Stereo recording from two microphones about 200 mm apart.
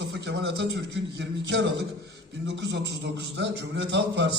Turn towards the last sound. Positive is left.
turn(degrees=-65)  # may be behind; listen again after turning